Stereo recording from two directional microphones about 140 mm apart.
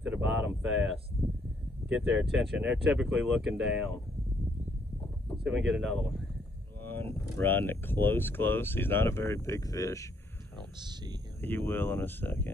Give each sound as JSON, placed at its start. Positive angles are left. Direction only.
{"t": 0.0, "sound": "a sound", "side_deg": -5}
{"t": 1.2, "sound": "a sound", "side_deg": -15}
{"t": 1.9, "sound": "speech", "side_deg": 0}
{"t": 5.4, "sound": "speech", "side_deg": -5}
{"t": 6.8, "sound": "speech", "side_deg": 15}
{"t": 10.8, "sound": "speech", "side_deg": -30}
{"t": 11.4, "sound": "speech", "side_deg": 15}